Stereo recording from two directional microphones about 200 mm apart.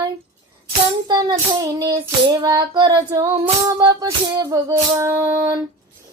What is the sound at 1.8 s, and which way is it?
Child singing, 20° right (ahead or behind).